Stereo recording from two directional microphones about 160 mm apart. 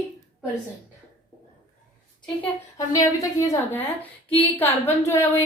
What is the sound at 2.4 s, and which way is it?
A woman's voice, 20° left (ahead or behind).